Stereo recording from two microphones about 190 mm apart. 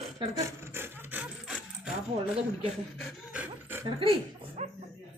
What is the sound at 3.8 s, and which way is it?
Speech, 25° right (ahead or behind).